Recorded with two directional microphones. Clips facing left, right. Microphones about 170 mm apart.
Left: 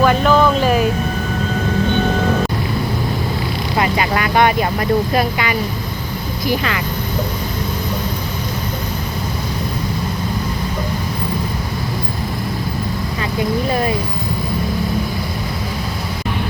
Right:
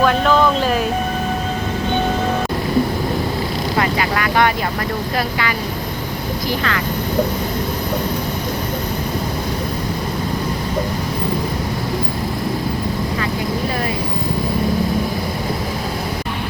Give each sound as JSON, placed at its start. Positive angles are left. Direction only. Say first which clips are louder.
{"t": 0.0, "sound": "a sound", "louder": "left 1 dB", "side_deg": 5}
{"t": 3.8, "sound": "vehicle", "louder": "left 2 dB", "side_deg": 20}
{"t": 5.1, "sound": "speech", "louder": "left 3 dB", "side_deg": 20}